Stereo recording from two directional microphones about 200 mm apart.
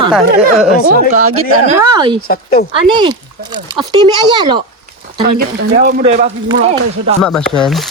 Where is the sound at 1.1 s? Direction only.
90° right.